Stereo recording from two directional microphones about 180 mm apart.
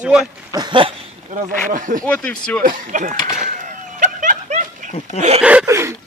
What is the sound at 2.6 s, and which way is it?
Speech, 50° right (ahead or behind).